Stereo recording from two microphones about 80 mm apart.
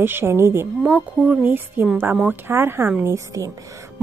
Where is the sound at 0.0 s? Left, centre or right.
Right.